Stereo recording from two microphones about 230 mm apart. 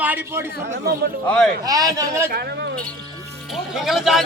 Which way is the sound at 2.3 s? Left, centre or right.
Right.